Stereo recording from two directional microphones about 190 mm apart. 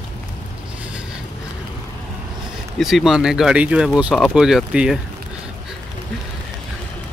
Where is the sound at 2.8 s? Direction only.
Centre (ahead or behind).